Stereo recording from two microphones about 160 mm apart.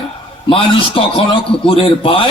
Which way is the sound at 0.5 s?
35° left (ahead or behind).